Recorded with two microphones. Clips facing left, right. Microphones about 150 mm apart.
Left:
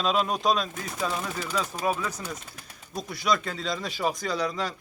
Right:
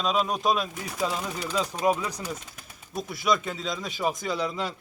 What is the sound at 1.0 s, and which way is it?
Speech, 15° right (ahead or behind).